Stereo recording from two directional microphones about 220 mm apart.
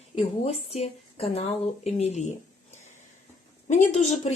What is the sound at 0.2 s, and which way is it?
A woman's voice, 30° left (ahead or behind).